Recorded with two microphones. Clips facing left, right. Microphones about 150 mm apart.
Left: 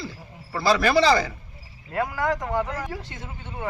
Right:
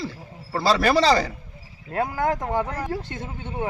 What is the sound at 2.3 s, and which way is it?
Speech, 35° right (ahead or behind).